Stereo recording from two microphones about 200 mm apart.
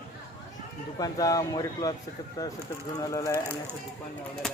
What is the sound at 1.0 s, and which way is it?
Speech, 20° left (ahead or behind).